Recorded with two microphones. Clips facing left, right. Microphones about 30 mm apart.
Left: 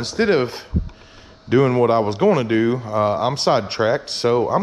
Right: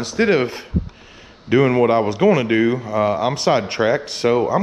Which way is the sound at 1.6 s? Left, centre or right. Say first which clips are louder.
Right 1 dB; right.